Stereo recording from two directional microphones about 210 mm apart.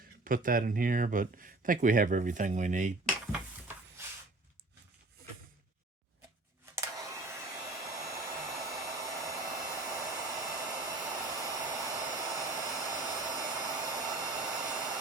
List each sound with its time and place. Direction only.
0.3 s speech: 40° right (ahead or behind)
6.7 s hair dryer: 15° right (ahead or behind)